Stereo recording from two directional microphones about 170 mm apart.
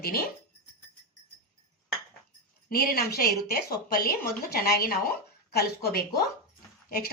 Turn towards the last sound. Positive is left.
turn(degrees=60)  # may be behind; listen again after turning